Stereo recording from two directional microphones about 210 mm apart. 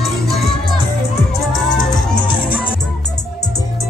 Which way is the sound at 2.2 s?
25° left (ahead or behind).